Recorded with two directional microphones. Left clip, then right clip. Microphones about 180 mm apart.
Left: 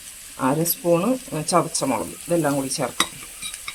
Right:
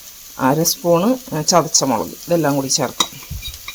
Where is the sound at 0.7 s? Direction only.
30° right (ahead or behind).